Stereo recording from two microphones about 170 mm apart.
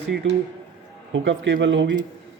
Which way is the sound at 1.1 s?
90° right.